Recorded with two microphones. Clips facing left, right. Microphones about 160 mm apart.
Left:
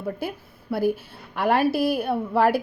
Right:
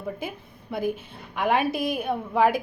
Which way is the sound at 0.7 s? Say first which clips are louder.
Left 4 dB; 5° left (ahead or behind).